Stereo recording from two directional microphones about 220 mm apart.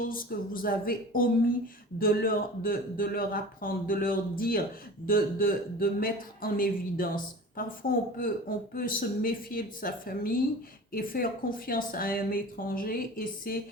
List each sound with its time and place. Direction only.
0.1 s speech: 40° left (ahead or behind)